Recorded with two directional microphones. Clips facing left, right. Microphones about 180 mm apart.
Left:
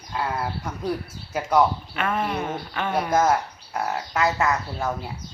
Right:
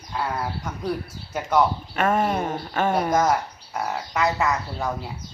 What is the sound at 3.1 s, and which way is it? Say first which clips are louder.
Speech: even; centre (ahead or behind).